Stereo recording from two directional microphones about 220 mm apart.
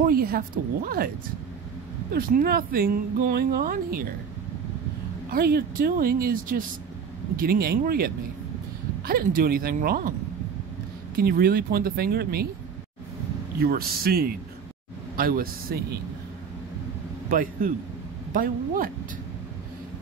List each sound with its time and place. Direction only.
0.0 s speech: 40° right (ahead or behind)
2.1 s speech: 40° right (ahead or behind)
5.3 s speech: 45° right (ahead or behind)
11.1 s speech: 45° right (ahead or behind)
13.6 s speech: 45° right (ahead or behind)
17.3 s a man's voice: 40° right (ahead or behind)